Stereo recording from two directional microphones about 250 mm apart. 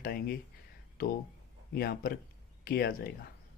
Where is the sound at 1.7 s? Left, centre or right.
Left.